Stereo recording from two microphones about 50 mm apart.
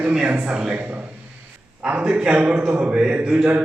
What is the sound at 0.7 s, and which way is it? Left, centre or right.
A man's voice, right.